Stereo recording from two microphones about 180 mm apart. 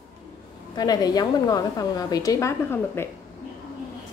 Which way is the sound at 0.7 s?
20° left (ahead or behind).